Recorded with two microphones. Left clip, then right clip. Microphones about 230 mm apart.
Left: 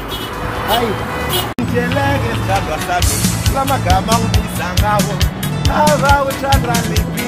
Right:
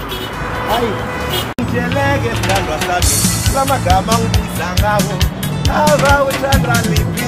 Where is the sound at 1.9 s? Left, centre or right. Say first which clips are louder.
Right 1 dB; centre.